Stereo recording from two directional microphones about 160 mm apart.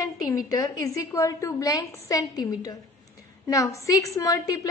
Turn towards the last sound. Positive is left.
turn(degrees=20)  # may be behind; listen again after turning